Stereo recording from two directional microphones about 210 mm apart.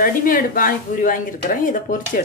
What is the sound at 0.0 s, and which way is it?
Speech, 40° left (ahead or behind).